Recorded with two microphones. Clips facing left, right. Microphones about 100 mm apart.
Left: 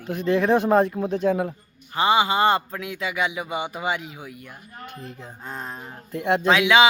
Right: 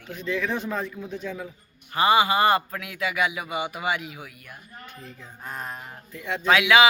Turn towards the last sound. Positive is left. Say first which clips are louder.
# left 1 dB
turn(degrees=25)  # may be behind; listen again after turning